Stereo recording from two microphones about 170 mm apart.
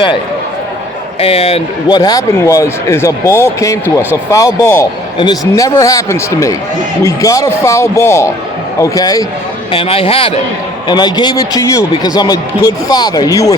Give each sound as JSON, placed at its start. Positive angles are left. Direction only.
{"t": 1.2, "sound": "a man's voice", "side_deg": 35}
{"t": 1.9, "sound": "a man's voice", "side_deg": 20}
{"t": 9.7, "sound": "a man's voice", "side_deg": 35}